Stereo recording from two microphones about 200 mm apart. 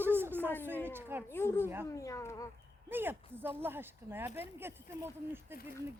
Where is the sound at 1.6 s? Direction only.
10° right (ahead or behind).